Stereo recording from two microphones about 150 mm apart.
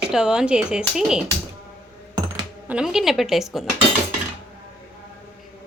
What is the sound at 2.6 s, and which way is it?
A woman's voice, 5° right (ahead or behind).